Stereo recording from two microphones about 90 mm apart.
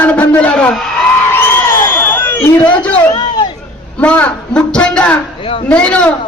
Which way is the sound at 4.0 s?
15° left (ahead or behind).